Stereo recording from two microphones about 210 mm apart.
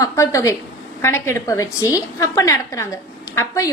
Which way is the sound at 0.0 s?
15° left (ahead or behind).